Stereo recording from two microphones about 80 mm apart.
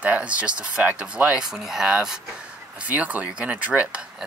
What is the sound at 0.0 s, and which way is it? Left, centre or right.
Speech, centre.